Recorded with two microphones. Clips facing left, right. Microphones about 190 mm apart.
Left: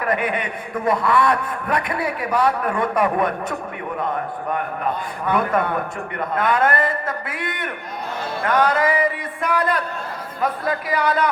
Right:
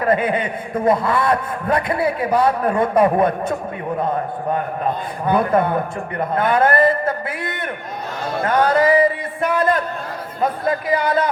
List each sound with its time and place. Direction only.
0.0 s a man's voice: 30° right (ahead or behind)
4.5 s a man's voice: 30° right (ahead or behind)